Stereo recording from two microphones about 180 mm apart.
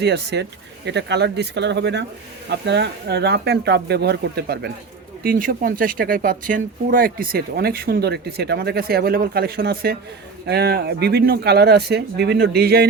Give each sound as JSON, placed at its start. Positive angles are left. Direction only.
{"t": 0.0, "sound": "speech", "side_deg": -70}